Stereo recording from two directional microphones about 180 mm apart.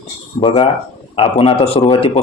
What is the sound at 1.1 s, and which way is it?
Speech, 35° left (ahead or behind).